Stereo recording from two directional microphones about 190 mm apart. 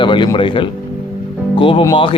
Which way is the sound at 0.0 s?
25° left (ahead or behind).